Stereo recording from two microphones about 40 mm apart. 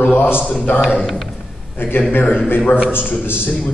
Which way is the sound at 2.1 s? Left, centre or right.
Left.